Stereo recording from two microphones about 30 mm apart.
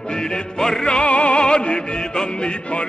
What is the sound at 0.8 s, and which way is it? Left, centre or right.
Music, left.